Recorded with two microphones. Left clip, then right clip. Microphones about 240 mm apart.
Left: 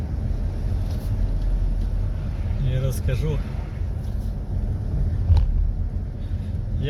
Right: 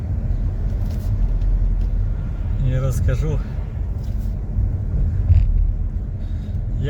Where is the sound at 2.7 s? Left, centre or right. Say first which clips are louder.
Right 3 dB; right.